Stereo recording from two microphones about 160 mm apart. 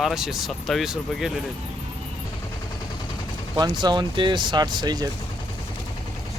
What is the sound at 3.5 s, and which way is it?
Speech, 25° right (ahead or behind).